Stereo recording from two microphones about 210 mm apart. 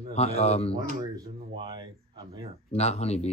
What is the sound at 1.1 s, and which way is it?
Speech, 20° right (ahead or behind).